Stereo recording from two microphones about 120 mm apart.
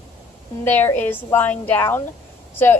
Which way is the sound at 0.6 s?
15° left (ahead or behind).